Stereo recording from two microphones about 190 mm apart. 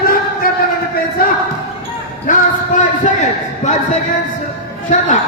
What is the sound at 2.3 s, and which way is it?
A man's voice, 45° left (ahead or behind).